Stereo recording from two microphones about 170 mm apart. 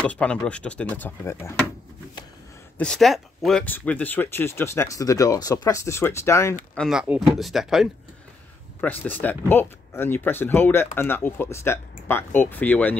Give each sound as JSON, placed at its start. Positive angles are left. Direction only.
{"t": 0.0, "sound": "speech", "side_deg": 5}
{"t": 2.8, "sound": "speech", "side_deg": 0}
{"t": 6.7, "sound": "speech", "side_deg": 0}
{"t": 8.8, "sound": "speech", "side_deg": 10}